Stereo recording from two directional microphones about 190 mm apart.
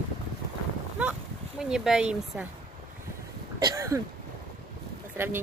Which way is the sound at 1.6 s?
5° right (ahead or behind).